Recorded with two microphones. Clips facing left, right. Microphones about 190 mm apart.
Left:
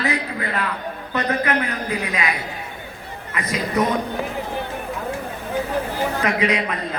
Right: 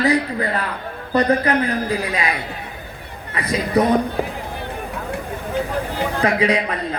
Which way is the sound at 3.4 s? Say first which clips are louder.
Right 4 dB; 35° right (ahead or behind).